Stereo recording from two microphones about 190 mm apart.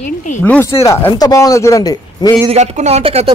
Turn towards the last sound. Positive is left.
turn(degrees=-30)  # may be behind; listen again after turning